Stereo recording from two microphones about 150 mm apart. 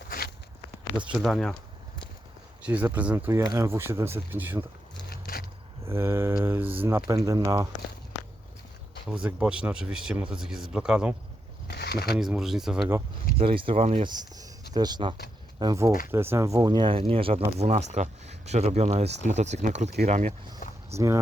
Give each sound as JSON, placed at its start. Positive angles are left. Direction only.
{"t": 0.9, "sound": "speech", "side_deg": -10}
{"t": 2.6, "sound": "speech", "side_deg": -10}
{"t": 5.0, "sound": "vehicle", "side_deg": 75}
{"t": 5.8, "sound": "speech", "side_deg": -15}
{"t": 9.0, "sound": "speech", "side_deg": -5}
{"t": 11.7, "sound": "a sound", "side_deg": 90}
{"t": 12.1, "sound": "speech", "side_deg": -5}
{"t": 13.4, "sound": "speech", "side_deg": -35}
{"t": 20.6, "sound": "a sound", "side_deg": 60}